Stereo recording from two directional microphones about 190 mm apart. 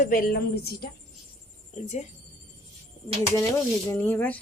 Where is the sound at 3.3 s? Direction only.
10° left (ahead or behind).